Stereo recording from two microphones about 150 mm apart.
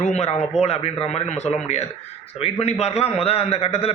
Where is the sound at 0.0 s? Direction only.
45° left (ahead or behind).